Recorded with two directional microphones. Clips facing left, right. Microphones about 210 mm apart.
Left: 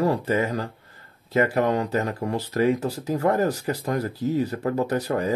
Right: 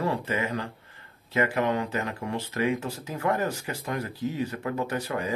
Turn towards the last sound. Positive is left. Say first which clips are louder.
# left 6 dB
turn(degrees=40)  # may be behind; listen again after turning